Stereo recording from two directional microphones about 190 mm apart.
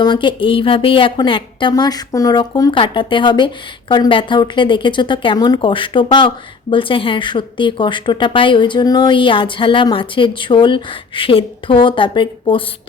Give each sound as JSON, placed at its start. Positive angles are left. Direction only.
{"t": 0.0, "sound": "speech", "side_deg": 25}